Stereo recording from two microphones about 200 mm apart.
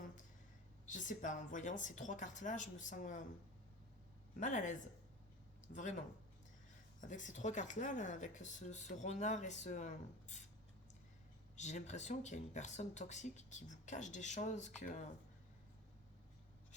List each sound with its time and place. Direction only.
0.9 s speech: 40° left (ahead or behind)
4.4 s speech: 40° left (ahead or behind)
7.0 s speech: 40° left (ahead or behind)
11.5 s speech: 35° left (ahead or behind)